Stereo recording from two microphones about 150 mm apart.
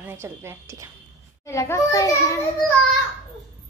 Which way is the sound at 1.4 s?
20° left (ahead or behind).